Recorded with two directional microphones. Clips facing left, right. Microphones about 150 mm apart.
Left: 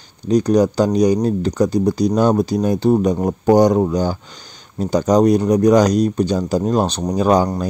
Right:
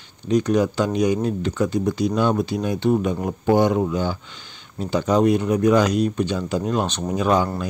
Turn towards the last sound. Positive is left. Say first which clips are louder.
# left 4 dB
turn(degrees=40)  # may be behind; listen again after turning